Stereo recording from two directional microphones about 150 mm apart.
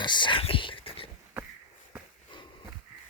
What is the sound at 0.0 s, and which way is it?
Whispering, 30° left (ahead or behind).